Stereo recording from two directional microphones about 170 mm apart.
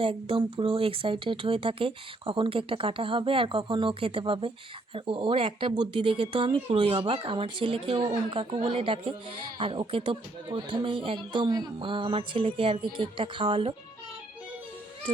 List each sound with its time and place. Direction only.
0.0 s speech: 30° right (ahead or behind)
8.0 s speech: 20° right (ahead or behind)
8.4 s speech: 30° right (ahead or behind)